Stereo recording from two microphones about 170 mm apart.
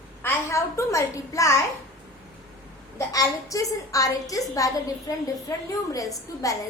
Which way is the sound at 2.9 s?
20° left (ahead or behind).